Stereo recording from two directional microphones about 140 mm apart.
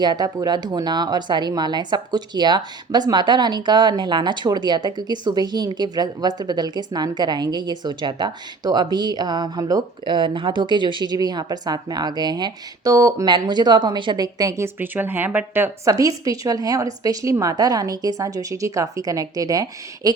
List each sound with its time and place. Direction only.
0.0 s speech: 30° right (ahead or behind)